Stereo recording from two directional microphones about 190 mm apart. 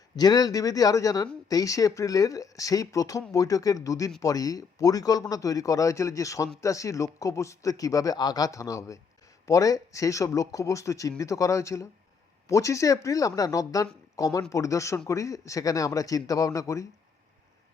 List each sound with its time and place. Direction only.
0.2 s speech: 20° left (ahead or behind)